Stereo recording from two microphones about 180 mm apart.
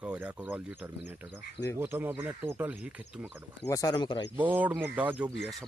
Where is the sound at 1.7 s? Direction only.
10° right (ahead or behind).